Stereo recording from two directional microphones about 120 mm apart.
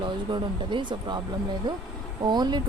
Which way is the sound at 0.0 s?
40° right (ahead or behind).